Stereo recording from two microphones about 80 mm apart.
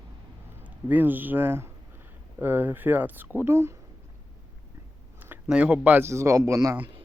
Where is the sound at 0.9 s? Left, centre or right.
Right.